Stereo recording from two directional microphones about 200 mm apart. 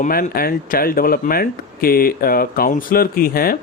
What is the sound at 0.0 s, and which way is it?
Speech, 45° left (ahead or behind).